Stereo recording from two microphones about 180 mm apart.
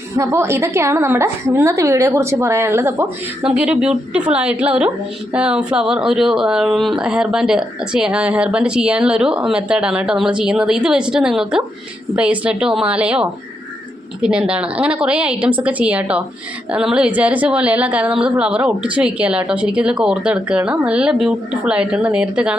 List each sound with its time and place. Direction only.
0.2 s a woman's voice: 15° right (ahead or behind)